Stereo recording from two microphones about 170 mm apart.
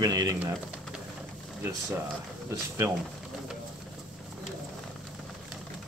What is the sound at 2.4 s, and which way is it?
Speech, 15° right (ahead or behind).